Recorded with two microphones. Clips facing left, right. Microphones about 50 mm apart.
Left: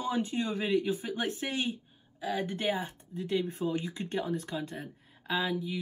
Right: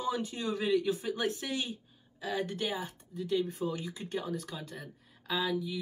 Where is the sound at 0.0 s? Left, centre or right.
Left.